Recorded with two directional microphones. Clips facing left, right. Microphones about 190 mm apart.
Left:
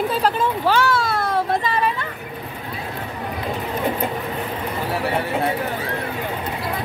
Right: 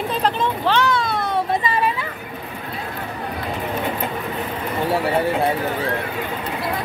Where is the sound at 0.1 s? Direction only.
5° left (ahead or behind).